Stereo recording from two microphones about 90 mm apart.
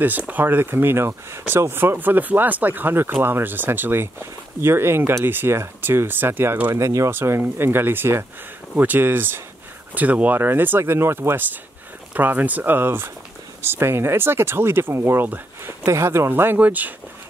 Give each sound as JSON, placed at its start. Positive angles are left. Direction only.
{"t": 0.3, "sound": "speech", "side_deg": -20}